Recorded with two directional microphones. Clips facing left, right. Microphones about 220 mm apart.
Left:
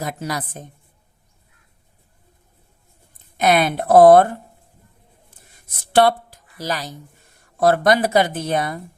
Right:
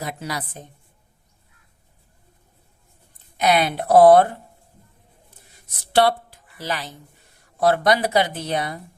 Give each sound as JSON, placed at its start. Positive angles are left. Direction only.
{"t": 0.0, "sound": "speech", "side_deg": 45}
{"t": 3.3, "sound": "speech", "side_deg": 50}
{"t": 5.9, "sound": "speech", "side_deg": 50}